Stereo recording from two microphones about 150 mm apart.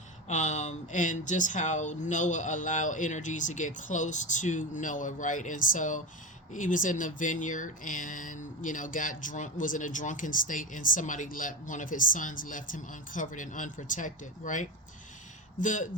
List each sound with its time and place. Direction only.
0.3 s speech: 50° left (ahead or behind)